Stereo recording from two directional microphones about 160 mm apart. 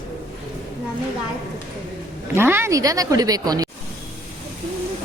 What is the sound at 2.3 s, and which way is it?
Speech, 15° right (ahead or behind).